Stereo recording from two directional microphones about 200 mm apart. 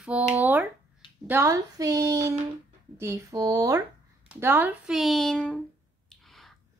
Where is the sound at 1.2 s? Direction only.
10° right (ahead or behind).